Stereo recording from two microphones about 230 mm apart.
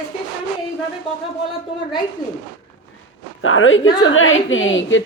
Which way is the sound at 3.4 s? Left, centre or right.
Left.